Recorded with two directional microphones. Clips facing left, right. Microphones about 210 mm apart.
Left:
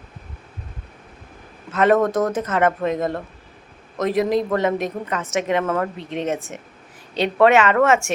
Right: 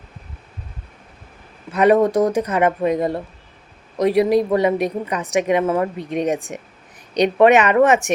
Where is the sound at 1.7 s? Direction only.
15° right (ahead or behind).